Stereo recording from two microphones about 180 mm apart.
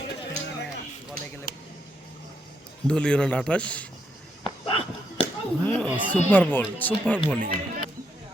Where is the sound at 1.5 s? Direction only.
50° left (ahead or behind).